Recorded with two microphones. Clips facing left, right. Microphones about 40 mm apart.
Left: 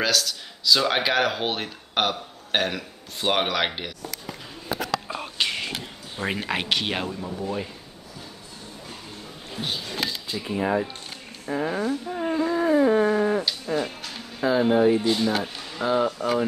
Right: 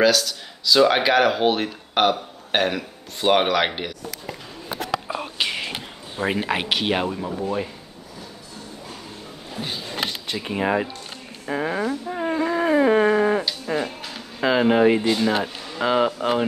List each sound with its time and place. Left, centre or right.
0.0 s speech: centre
5.0 s music: centre
6.1 s speech: centre
7.1 s speech: right
9.9 s music: right
11.4 s speech: right
12.1 s a sound: right
12.4 s a sound: right
13.7 s speech: right
14.4 s speech: right
16.2 s speech: right